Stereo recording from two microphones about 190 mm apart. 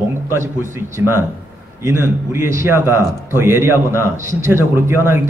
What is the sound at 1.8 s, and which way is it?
A man's voice, 15° right (ahead or behind).